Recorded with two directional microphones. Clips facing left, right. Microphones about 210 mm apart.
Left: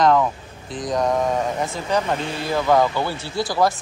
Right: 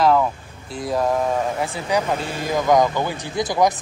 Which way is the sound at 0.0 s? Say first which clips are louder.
Even; 5° right (ahead or behind).